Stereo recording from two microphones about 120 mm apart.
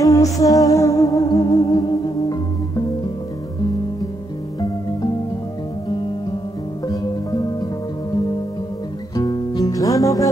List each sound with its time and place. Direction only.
0.0 s music: 30° left (ahead or behind)
6.9 s music: 35° left (ahead or behind)
9.1 s music: 35° left (ahead or behind)